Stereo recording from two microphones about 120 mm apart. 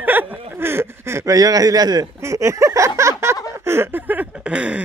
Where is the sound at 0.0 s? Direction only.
15° right (ahead or behind).